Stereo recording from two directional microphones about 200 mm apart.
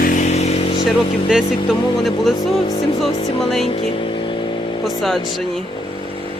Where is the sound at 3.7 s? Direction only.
25° left (ahead or behind).